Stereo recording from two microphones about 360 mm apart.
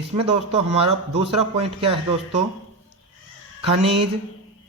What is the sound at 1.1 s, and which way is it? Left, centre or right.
A man's voice, centre.